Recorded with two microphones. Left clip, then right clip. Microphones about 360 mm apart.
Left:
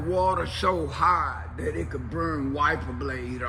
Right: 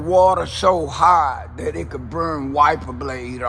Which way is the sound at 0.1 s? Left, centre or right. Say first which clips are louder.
Right 10 dB; centre.